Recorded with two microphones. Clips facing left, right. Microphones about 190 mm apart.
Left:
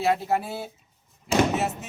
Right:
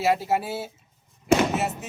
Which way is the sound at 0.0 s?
5° right (ahead or behind).